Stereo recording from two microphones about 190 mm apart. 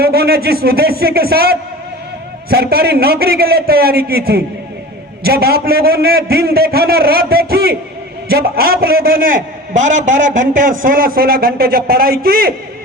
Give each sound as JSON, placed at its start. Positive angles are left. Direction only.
{"t": 0.0, "sound": "a man's voice", "side_deg": -55}